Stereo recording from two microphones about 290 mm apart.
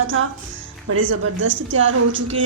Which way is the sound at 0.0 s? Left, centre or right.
Right.